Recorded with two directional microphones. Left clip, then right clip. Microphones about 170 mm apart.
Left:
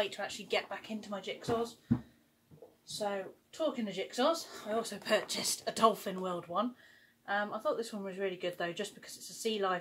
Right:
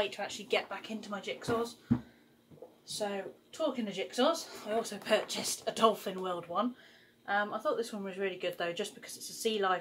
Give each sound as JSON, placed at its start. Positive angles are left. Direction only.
{"t": 0.0, "sound": "speech", "side_deg": 15}
{"t": 3.0, "sound": "speech", "side_deg": 10}